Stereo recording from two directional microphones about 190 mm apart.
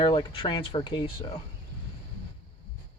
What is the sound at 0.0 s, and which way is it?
Speech, 25° left (ahead or behind).